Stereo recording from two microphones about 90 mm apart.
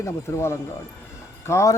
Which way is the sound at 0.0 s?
30° left (ahead or behind).